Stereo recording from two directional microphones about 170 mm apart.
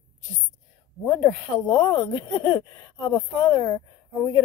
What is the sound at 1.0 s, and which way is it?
Speech, 20° left (ahead or behind).